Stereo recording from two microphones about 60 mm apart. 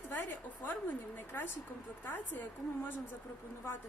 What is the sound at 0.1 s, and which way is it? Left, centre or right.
A woman's voice, left.